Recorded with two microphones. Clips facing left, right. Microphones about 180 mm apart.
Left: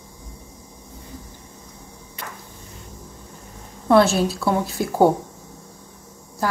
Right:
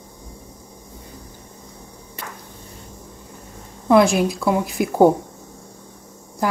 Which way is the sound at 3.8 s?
15° right (ahead or behind).